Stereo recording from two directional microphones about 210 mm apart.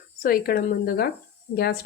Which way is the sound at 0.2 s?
45° left (ahead or behind).